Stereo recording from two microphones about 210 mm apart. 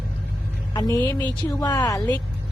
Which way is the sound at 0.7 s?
15° left (ahead or behind).